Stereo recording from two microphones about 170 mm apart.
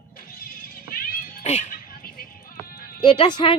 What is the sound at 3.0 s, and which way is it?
Speech, 30° left (ahead or behind).